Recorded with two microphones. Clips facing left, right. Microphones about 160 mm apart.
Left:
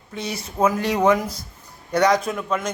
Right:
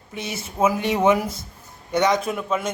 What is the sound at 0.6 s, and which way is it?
A woman's voice, 5° right (ahead or behind).